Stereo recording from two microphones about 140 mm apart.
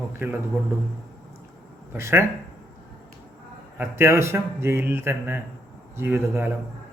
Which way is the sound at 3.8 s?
20° right (ahead or behind).